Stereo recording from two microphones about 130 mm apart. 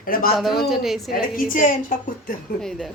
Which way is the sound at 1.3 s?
90° left.